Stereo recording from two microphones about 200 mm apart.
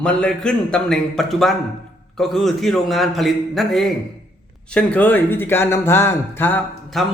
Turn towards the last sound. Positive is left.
turn(degrees=0)  # may be behind; listen again after turning